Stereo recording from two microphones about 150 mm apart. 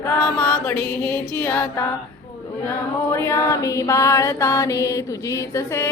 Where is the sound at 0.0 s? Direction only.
10° left (ahead or behind).